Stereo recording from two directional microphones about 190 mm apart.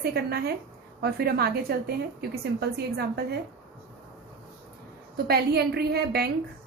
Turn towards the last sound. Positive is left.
turn(degrees=-55)  # may be behind; listen again after turning